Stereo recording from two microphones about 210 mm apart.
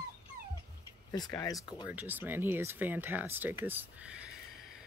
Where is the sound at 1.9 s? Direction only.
10° right (ahead or behind).